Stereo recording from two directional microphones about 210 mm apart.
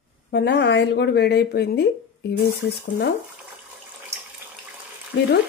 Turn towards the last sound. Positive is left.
turn(degrees=55)  # may be behind; listen again after turning